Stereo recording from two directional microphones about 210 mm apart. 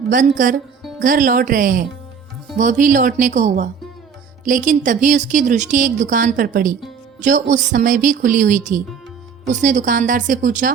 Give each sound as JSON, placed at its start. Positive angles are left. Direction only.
{"t": 0.1, "sound": "speech", "side_deg": -40}